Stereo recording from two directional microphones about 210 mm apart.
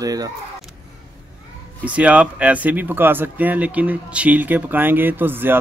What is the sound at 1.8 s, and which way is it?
Speech, 5° right (ahead or behind).